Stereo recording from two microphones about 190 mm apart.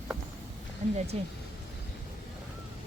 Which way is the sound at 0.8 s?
40° right (ahead or behind).